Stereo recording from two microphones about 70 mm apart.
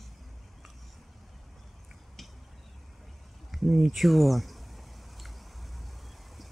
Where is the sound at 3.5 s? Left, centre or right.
Centre.